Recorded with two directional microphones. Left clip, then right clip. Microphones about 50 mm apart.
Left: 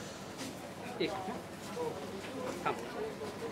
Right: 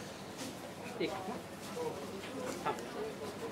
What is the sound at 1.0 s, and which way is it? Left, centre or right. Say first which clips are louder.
Speech: left 2 dB; left.